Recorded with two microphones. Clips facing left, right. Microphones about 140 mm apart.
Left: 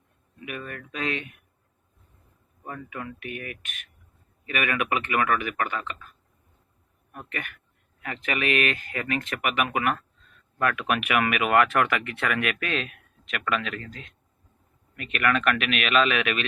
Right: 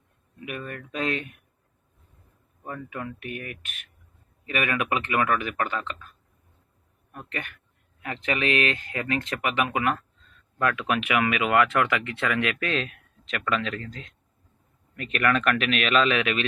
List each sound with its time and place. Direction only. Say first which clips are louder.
0.7 s speech: right 3 dB; 35° right (ahead or behind)
2.9 s speech: even; 40° right (ahead or behind)
7.3 s speech: right 1 dB; 30° right (ahead or behind)